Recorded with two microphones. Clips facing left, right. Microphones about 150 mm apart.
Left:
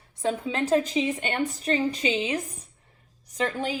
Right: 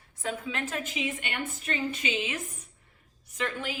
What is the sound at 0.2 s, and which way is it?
A woman's voice, 30° left (ahead or behind).